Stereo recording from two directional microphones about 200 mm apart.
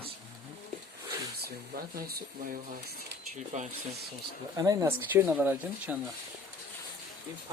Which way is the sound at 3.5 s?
40° right (ahead or behind).